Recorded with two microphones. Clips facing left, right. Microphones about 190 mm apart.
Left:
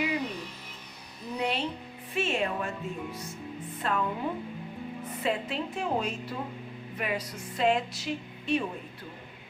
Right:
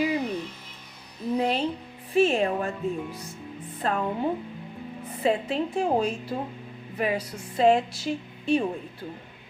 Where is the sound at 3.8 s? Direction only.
40° right (ahead or behind).